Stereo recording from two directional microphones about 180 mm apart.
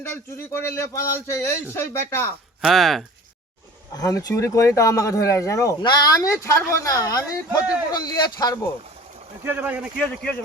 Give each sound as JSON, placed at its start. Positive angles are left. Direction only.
{"t": 0.0, "sound": "speech", "side_deg": 15}
{"t": 2.6, "sound": "speech", "side_deg": 0}
{"t": 3.9, "sound": "speech", "side_deg": 20}
{"t": 9.4, "sound": "speech", "side_deg": -10}
{"t": 10.0, "sound": "speech", "side_deg": 5}